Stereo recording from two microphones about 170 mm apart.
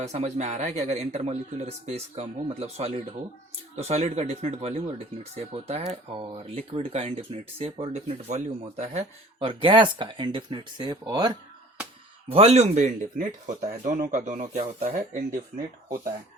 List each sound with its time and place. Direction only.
0.0 s speech: 40° right (ahead or behind); by 11.3 s 25° right (ahead or behind)
12.3 s speech: 40° right (ahead or behind)